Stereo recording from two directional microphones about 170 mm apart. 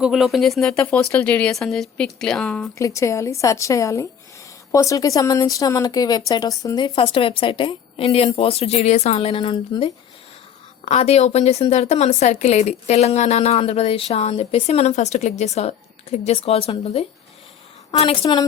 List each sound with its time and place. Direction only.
0.0 s speech: centre (ahead or behind)
2.7 s a woman's voice: 15° left (ahead or behind)
10.8 s a woman's voice: 40° left (ahead or behind)